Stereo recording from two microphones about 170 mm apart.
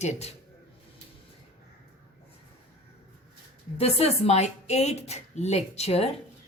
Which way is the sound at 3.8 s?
35° left (ahead or behind).